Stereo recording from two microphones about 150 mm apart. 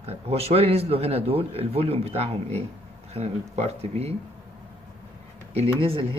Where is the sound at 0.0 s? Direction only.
40° right (ahead or behind).